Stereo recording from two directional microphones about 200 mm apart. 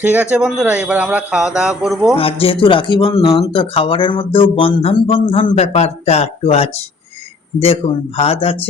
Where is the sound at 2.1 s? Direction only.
30° left (ahead or behind).